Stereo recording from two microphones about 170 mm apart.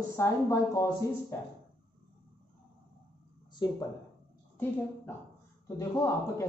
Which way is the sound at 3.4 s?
25° left (ahead or behind).